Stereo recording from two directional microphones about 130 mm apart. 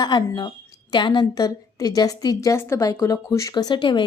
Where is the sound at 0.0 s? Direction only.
30° left (ahead or behind).